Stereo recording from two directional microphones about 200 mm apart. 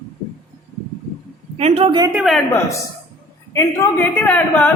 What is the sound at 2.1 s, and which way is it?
Speech, centre (ahead or behind).